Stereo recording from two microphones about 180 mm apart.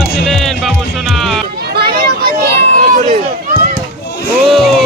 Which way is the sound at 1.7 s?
60° right (ahead or behind).